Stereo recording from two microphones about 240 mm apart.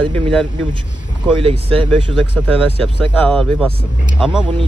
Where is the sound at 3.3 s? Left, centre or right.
Centre.